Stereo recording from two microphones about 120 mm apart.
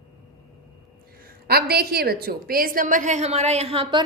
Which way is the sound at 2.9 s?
90° right.